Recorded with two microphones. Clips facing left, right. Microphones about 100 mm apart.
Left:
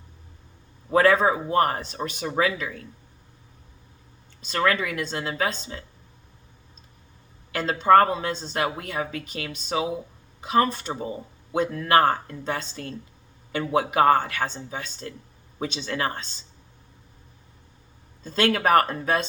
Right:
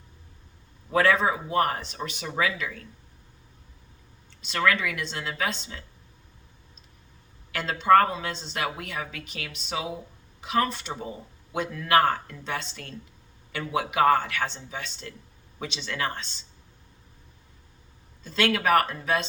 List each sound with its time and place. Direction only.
0.9 s a man's voice: 30° left (ahead or behind)
4.4 s speech: 40° left (ahead or behind)
7.5 s speech: 40° left (ahead or behind)
18.2 s speech: 40° left (ahead or behind)